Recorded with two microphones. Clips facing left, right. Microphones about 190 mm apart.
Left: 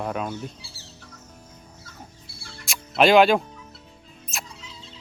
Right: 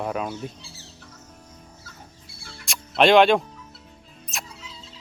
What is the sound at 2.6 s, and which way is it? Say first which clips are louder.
Music: even; centre (ahead or behind).